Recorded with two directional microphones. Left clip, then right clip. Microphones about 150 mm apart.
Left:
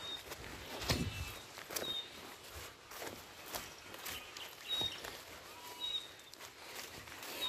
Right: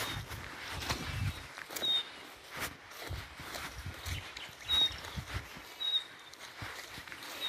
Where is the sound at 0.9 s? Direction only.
90° left.